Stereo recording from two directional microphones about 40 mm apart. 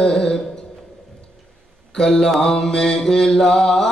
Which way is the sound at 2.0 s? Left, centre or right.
Centre.